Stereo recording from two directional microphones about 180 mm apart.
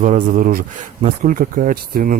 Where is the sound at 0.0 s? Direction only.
45° right (ahead or behind).